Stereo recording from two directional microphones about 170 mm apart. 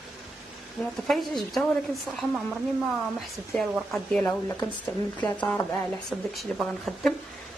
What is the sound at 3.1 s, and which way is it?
A woman's voice, centre (ahead or behind).